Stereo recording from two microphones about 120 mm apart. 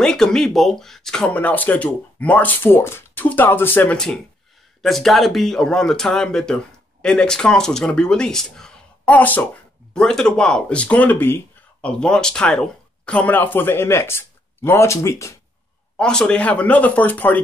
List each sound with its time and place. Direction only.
0.0 s speech: 5° left (ahead or behind)
4.8 s speech: centre (ahead or behind); by 15.3 s 25° left (ahead or behind)
16.0 s speech: 5° left (ahead or behind)